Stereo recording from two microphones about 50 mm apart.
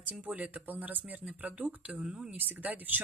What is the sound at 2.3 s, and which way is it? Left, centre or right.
Speech, right.